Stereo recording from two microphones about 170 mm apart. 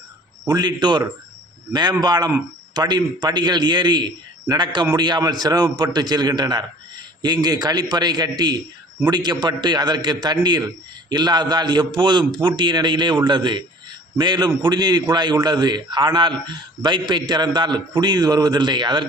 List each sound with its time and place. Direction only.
0.4 s a man's voice: 25° right (ahead or behind)